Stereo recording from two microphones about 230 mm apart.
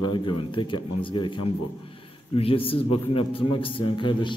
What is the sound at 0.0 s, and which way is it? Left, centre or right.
A man's voice, left.